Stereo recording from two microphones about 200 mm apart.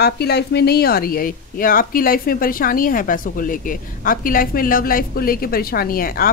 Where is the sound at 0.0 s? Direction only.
55° left (ahead or behind).